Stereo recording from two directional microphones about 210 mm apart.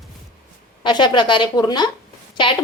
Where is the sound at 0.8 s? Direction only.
20° left (ahead or behind).